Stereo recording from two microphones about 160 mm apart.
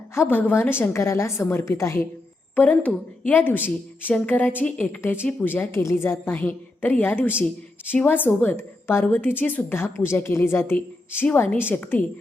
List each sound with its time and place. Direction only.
0.1 s a woman's voice: 15° left (ahead or behind)